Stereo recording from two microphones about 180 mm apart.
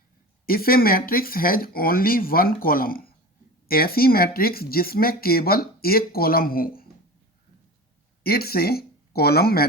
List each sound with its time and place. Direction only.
0.4 s speech: 55° left (ahead or behind)
8.2 s speech: 60° left (ahead or behind)